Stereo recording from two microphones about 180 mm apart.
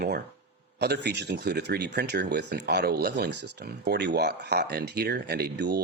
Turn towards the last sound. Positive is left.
turn(degrees=-65)  # may be behind; listen again after turning